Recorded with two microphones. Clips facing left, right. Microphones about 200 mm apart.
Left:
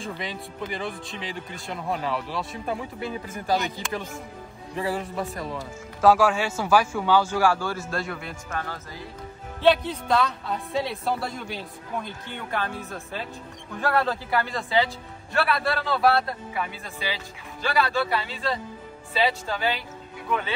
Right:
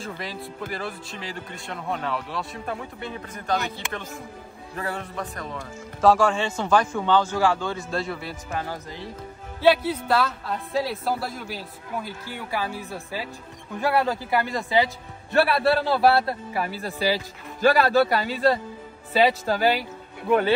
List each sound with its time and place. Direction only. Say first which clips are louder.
0.0 s speech: even; centre (ahead or behind)
4.7 s speech: left 3 dB; centre (ahead or behind)
8.5 s a man's voice: right 3 dB; 15° right (ahead or behind)
15.5 s a man's voice: right 5 dB; 30° right (ahead or behind)